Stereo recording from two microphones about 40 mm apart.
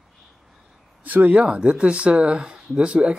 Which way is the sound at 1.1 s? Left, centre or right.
Right.